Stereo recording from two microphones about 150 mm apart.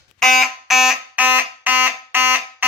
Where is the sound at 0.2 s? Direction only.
Centre (ahead or behind).